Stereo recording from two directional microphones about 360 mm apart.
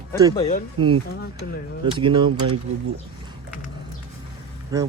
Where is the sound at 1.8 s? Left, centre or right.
Centre.